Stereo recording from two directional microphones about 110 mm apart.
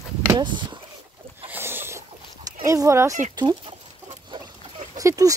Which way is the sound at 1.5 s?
20° right (ahead or behind).